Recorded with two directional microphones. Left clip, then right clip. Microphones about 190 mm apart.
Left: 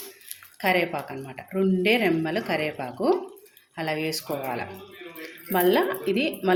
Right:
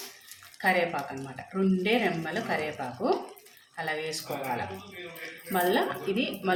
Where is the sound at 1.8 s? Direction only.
40° left (ahead or behind).